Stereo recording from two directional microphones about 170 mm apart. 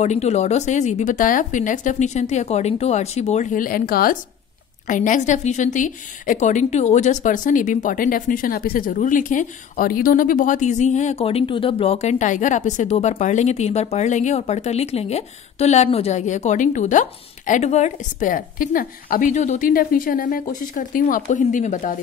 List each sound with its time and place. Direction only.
0.0 s a woman's voice: 40° left (ahead or behind)